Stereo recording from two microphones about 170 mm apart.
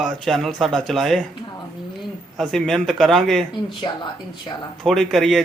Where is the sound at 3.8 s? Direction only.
25° left (ahead or behind).